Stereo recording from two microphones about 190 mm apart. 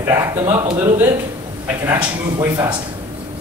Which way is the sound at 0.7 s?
20° right (ahead or behind).